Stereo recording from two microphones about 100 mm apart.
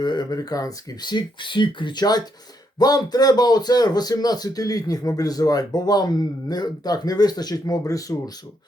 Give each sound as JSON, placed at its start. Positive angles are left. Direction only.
{"t": 0.0, "sound": "speech", "side_deg": 45}